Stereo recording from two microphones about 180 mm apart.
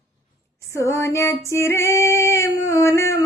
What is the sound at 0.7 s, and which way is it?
Female singing, 15° left (ahead or behind).